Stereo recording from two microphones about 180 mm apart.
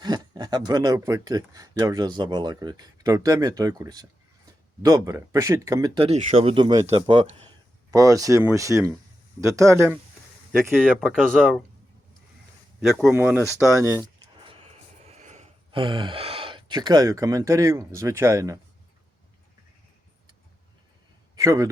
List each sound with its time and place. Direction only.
0.0 s speech: 25° right (ahead or behind)
10.8 s speech: 5° left (ahead or behind)
12.8 s speech: 5° right (ahead or behind)
14.4 s a sound: 30° right (ahead or behind)
15.8 s speech: 25° right (ahead or behind)
21.3 s a man's voice: 20° right (ahead or behind)